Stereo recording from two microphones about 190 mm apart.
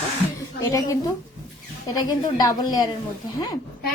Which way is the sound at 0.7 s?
20° left (ahead or behind).